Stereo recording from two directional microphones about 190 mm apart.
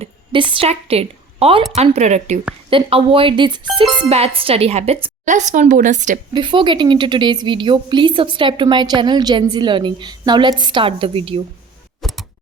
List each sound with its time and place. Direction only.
0.0 s a woman's voice: 25° right (ahead or behind)
6.3 s a woman's voice: 25° right (ahead or behind)
12.0 s a sound: centre (ahead or behind)